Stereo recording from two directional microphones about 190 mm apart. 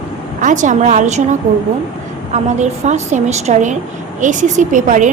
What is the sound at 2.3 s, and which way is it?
A woman's voice, 35° right (ahead or behind).